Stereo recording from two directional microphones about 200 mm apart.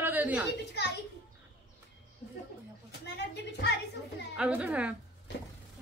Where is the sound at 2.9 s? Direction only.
55° left (ahead or behind).